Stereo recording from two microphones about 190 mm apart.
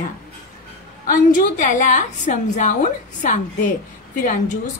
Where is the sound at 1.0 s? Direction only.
45° left (ahead or behind).